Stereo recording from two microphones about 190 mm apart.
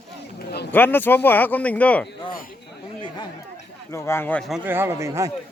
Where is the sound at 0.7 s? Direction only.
10° left (ahead or behind).